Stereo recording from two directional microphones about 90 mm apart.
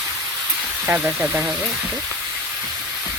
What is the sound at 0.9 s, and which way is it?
Speech, 20° right (ahead or behind).